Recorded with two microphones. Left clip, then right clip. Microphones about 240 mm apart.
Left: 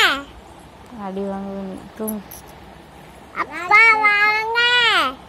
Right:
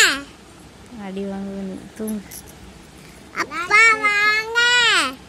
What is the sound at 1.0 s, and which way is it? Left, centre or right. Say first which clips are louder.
Speech: left 3 dB; centre.